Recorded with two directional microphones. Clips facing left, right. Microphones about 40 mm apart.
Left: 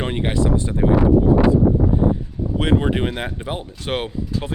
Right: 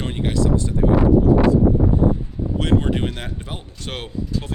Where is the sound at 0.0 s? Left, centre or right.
Left.